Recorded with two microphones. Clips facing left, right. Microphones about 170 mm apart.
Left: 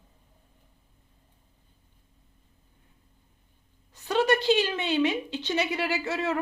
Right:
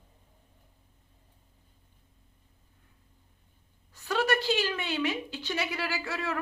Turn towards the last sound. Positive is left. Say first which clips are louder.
# left 5 dB
turn(degrees=20)  # may be behind; listen again after turning